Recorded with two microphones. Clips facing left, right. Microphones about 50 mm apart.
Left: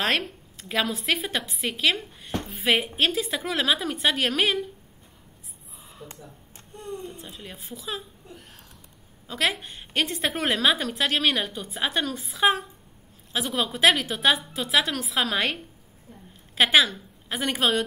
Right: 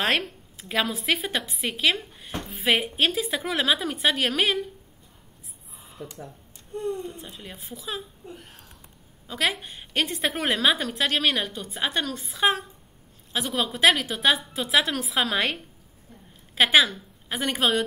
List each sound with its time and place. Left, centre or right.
0.0 s a woman's voice: centre
6.0 s speech: right
7.1 s a woman's voice: centre
9.3 s a woman's voice: centre